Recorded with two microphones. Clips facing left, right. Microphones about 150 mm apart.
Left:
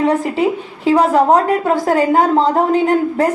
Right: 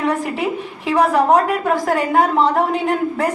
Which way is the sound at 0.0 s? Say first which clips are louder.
Left 5 dB; 30° left (ahead or behind).